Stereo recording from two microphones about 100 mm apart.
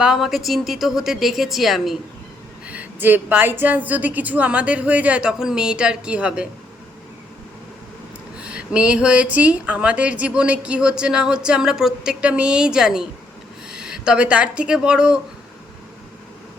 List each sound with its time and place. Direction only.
0.0 s a woman's voice: 5° right (ahead or behind)
2.6 s speech: 15° right (ahead or behind)
8.4 s speech: 10° right (ahead or behind)